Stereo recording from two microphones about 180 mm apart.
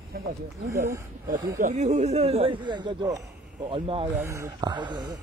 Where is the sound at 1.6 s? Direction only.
40° right (ahead or behind).